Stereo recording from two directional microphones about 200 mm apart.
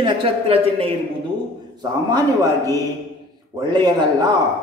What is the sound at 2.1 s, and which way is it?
A man's voice, 15° right (ahead or behind).